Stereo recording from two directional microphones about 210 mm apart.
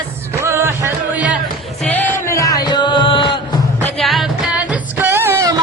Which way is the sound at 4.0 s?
Centre (ahead or behind).